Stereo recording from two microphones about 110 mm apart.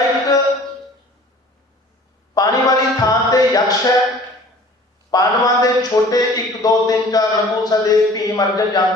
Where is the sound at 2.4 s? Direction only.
35° left (ahead or behind).